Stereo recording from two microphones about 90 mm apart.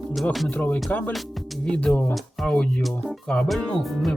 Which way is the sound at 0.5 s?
20° left (ahead or behind).